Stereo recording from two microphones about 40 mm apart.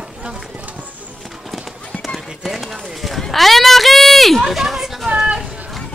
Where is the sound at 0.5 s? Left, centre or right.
Right.